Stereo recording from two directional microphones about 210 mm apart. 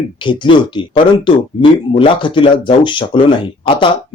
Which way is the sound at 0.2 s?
25° left (ahead or behind).